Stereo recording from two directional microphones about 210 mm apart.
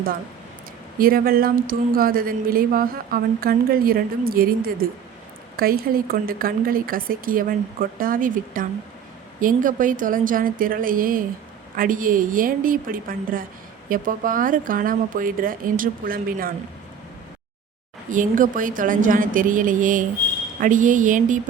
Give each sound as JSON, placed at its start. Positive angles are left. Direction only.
{"t": 0.9, "sound": "speech", "side_deg": -45}
{"t": 18.1, "sound": "speech", "side_deg": -40}